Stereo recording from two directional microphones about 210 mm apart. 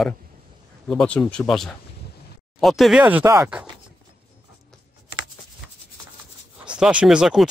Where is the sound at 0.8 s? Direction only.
5° left (ahead or behind).